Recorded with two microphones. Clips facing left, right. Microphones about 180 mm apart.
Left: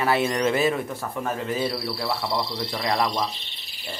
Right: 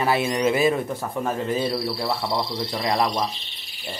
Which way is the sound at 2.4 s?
20° right (ahead or behind).